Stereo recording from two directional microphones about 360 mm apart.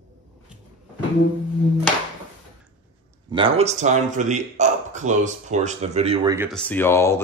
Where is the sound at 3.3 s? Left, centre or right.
Centre.